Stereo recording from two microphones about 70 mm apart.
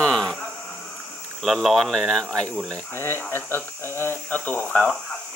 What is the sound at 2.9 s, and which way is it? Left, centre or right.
Speech, left.